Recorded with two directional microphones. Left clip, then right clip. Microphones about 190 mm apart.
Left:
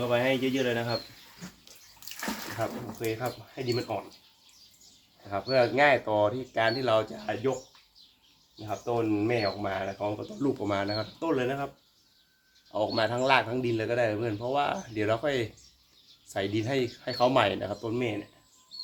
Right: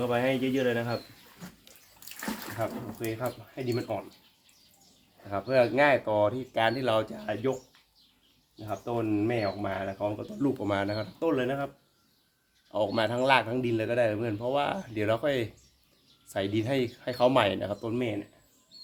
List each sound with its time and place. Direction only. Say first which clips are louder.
0.1 s speech: left 1 dB; 20° right (ahead or behind)
2.0 s bathtub: left 2 dB; 20° right (ahead or behind)
3.0 s speech: left 1 dB; 30° right (ahead or behind)
5.3 s speech: even; 30° right (ahead or behind)
8.5 s speech: left 2 dB; 25° right (ahead or behind)
12.7 s speech: even; 30° right (ahead or behind)